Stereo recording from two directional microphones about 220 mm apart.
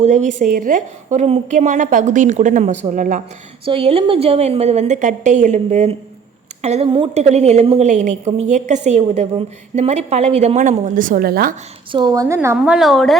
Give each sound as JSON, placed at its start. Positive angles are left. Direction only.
{"t": 0.0, "sound": "a woman's voice", "side_deg": -30}
{"t": 11.9, "sound": "a woman's voice", "side_deg": -20}